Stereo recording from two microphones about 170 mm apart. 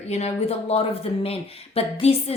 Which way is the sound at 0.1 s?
40° left (ahead or behind).